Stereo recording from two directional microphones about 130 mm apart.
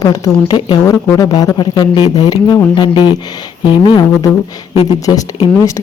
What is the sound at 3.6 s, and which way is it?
Speech, 35° left (ahead or behind).